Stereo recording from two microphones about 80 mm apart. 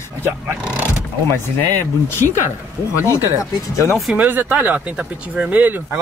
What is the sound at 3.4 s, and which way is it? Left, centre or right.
Speech, left.